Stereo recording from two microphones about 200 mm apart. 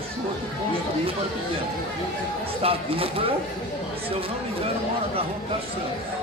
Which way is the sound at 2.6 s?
30° right (ahead or behind).